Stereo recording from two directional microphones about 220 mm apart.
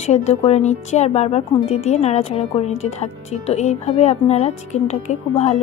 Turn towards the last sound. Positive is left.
turn(degrees=30)  # may be behind; listen again after turning